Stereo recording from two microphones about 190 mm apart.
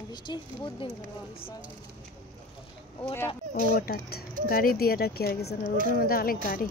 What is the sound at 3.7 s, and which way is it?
Speech, 50° left (ahead or behind).